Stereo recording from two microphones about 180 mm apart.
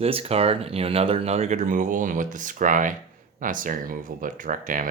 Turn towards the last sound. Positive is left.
turn(degrees=-50)  # may be behind; listen again after turning